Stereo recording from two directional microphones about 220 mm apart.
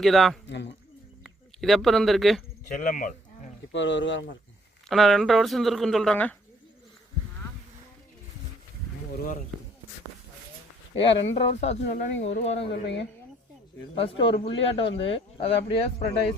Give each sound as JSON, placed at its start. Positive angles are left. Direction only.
{"t": 0.0, "sound": "speech", "side_deg": 0}
{"t": 0.4, "sound": "speech", "side_deg": 50}
{"t": 1.2, "sound": "speech", "side_deg": 0}
{"t": 2.7, "sound": "speech", "side_deg": 35}
{"t": 3.7, "sound": "speech", "side_deg": 55}
{"t": 4.9, "sound": "speech", "side_deg": 0}
{"t": 9.1, "sound": "speech", "side_deg": 40}
{"t": 10.9, "sound": "speech", "side_deg": 25}
{"t": 12.7, "sound": "speech", "side_deg": 50}
{"t": 13.9, "sound": "speech", "side_deg": 25}